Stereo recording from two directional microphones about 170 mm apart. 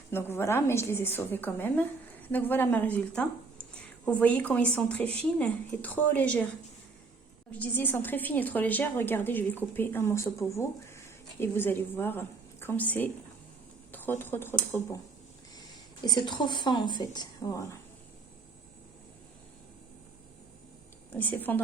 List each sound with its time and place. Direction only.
0.1 s a woman's voice: 15° left (ahead or behind)
7.6 s a woman's voice: 10° left (ahead or behind)
16.0 s a woman's voice: 25° left (ahead or behind)
21.1 s a woman's voice: 10° left (ahead or behind)